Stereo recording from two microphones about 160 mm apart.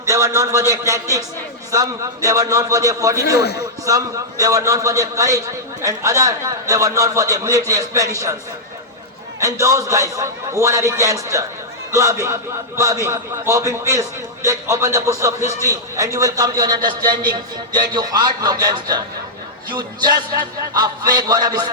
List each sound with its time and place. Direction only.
0.0 s a man's voice: 20° right (ahead or behind)
3.3 s a man's voice: 90° left
3.8 s a man's voice: 20° right (ahead or behind)
9.4 s a man's voice: 20° right (ahead or behind)